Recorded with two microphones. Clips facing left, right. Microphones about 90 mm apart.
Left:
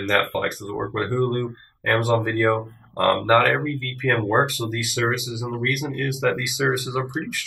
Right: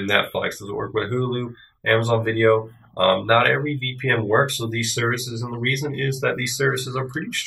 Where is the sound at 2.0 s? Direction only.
10° left (ahead or behind).